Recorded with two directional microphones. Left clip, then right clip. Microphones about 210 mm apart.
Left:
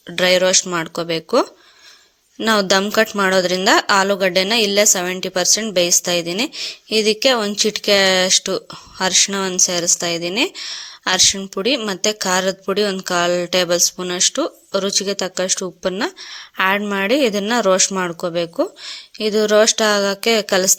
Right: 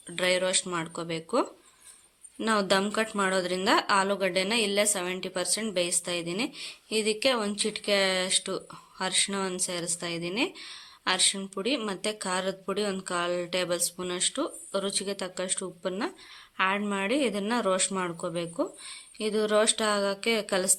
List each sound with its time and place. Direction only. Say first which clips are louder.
0.1 s speech: left 12 dB; 35° left (ahead or behind)